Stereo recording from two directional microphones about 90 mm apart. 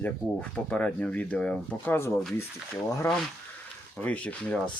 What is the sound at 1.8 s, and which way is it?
Speech, 25° left (ahead or behind).